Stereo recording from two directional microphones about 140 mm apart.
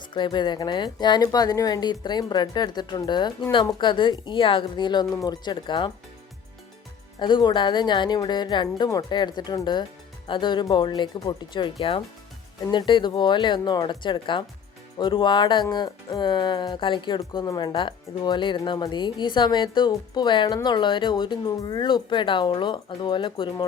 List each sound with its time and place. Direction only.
0.1 s speech: 30° left (ahead or behind)
7.2 s speech: 35° left (ahead or behind)